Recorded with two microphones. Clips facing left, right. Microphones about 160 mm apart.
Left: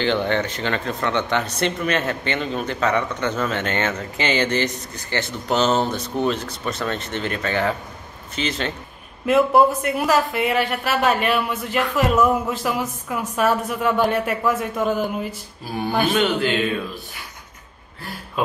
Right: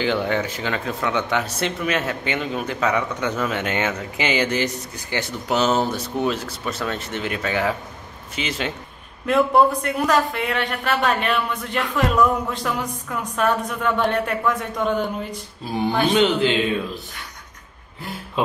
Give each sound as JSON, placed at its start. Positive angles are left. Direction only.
{"t": 0.0, "sound": "speech", "side_deg": -5}
{"t": 9.2, "sound": "a man's voice", "side_deg": 5}
{"t": 16.1, "sound": "a man's voice", "side_deg": -20}